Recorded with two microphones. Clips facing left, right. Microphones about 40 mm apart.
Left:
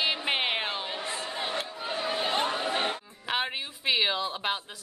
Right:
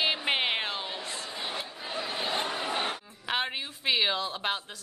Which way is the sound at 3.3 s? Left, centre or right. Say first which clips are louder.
Left 1 dB; centre.